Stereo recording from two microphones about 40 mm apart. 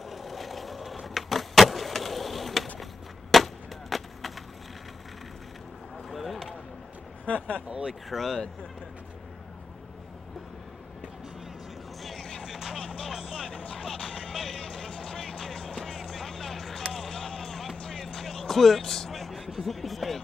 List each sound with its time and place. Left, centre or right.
0.0 s vehicle: centre
3.9 s wood: centre
6.0 s a sound: centre
7.2 s speech: left
7.8 s speech: centre
12.0 s music: centre
12.4 s vehicle: centre
14.3 s music: centre
14.6 s music: centre
16.9 s a sound: centre
17.4 s music: centre
17.9 s vehicle: centre